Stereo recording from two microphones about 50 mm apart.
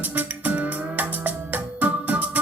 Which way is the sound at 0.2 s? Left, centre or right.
Right.